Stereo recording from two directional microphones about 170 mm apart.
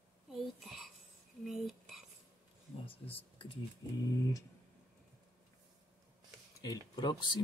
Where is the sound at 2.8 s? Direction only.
35° left (ahead or behind).